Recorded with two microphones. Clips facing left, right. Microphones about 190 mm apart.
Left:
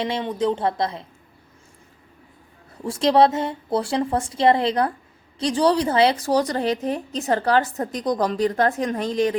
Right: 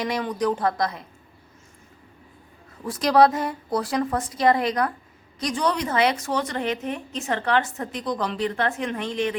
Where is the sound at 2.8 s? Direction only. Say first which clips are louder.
Left 1 dB; 30° left (ahead or behind).